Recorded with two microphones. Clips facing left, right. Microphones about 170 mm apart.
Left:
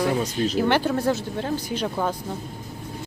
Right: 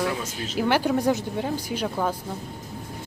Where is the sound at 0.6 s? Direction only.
10° right (ahead or behind).